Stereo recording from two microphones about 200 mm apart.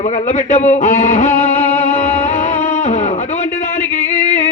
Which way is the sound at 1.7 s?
35° left (ahead or behind).